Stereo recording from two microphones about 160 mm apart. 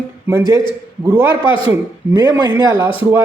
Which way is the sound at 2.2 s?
30° right (ahead or behind).